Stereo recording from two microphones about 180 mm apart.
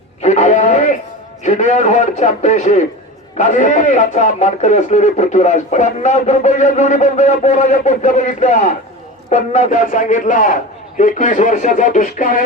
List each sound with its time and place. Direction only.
0.2 s radio: 40° left (ahead or behind)
1.5 s a man's voice: 40° left (ahead or behind)